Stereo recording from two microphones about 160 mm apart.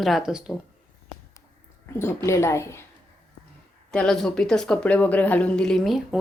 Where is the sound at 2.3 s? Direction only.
15° left (ahead or behind).